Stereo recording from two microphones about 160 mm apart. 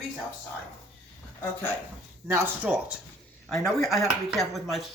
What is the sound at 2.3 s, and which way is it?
Speech, 10° right (ahead or behind).